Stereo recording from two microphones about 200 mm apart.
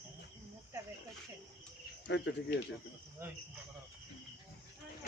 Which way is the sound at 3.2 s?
10° right (ahead or behind).